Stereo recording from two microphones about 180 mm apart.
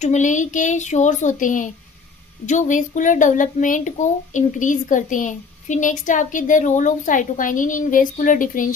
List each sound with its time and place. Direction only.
0.0 s speech: 40° left (ahead or behind)